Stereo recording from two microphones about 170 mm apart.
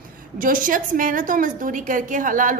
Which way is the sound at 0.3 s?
50° right (ahead or behind).